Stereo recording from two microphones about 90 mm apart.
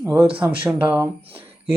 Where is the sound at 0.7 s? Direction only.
15° right (ahead or behind).